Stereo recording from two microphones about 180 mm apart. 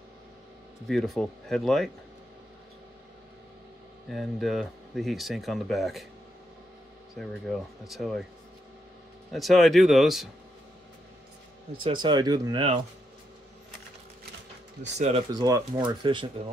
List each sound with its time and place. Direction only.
0.8 s speech: centre (ahead or behind)
4.1 s speech: centre (ahead or behind)
7.2 s speech: centre (ahead or behind)
9.3 s speech: centre (ahead or behind)
11.8 s speech: 25° right (ahead or behind)
15.0 s speech: 35° right (ahead or behind)
15.3 s speech: 20° right (ahead or behind)